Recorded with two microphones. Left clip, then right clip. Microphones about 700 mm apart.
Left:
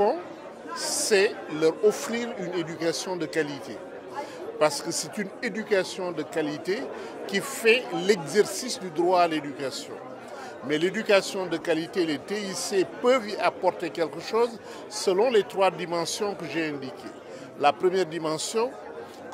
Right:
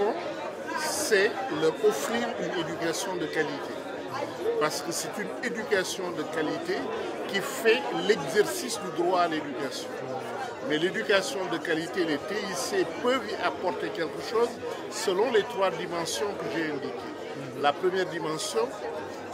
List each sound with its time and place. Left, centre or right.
0.7 s speech: left
4.6 s speech: left
10.7 s speech: left